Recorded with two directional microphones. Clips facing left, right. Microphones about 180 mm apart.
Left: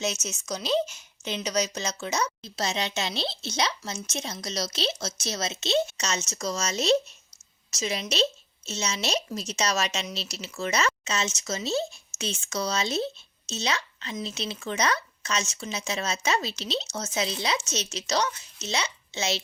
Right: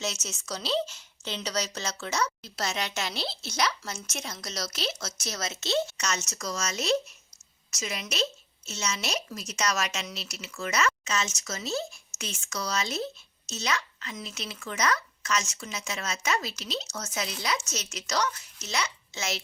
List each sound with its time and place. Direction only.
0.0 s speech: 20° left (ahead or behind)